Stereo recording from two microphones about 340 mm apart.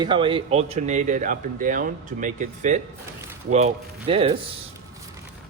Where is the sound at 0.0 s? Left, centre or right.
Centre.